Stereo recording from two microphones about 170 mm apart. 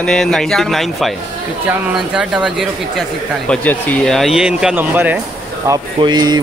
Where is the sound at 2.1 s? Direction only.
5° right (ahead or behind).